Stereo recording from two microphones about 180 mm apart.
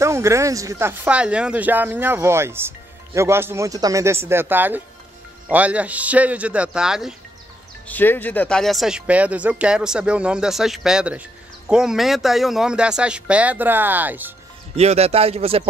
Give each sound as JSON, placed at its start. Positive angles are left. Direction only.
{"t": 0.0, "sound": "speech", "side_deg": -15}
{"t": 7.8, "sound": "speech", "side_deg": 10}
{"t": 14.8, "sound": "speech", "side_deg": -35}